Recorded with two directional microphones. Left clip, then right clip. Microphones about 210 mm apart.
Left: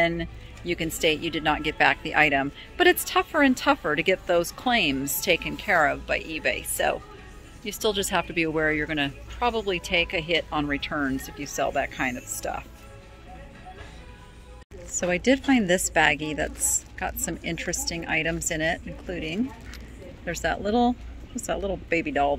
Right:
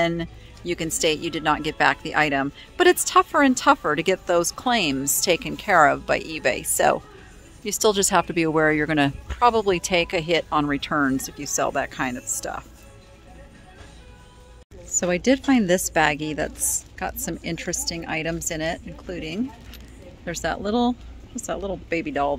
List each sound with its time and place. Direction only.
0.0 s speech: 20° right (ahead or behind)
11.1 s speech: 30° right (ahead or behind)
15.0 s a woman's voice: 20° right (ahead or behind)